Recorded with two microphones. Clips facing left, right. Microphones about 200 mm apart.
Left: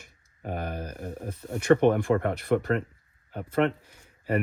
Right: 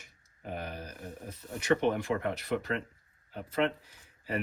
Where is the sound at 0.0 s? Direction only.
50° left (ahead or behind).